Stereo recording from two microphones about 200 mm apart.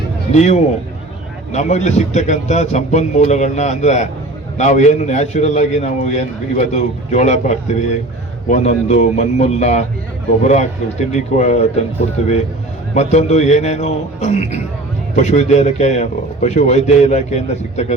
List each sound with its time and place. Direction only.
0.3 s a man's voice: 35° left (ahead or behind)